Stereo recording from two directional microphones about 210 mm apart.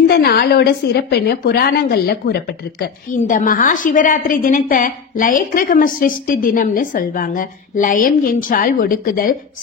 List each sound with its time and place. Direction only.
0.1 s a woman's voice: 50° left (ahead or behind)